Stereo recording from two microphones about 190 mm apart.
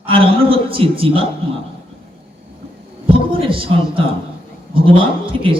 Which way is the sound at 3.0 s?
30° right (ahead or behind).